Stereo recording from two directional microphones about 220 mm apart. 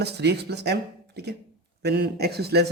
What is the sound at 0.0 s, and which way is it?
Speech, 50° right (ahead or behind).